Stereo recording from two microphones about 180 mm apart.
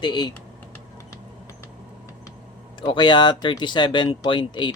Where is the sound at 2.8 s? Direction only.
25° left (ahead or behind).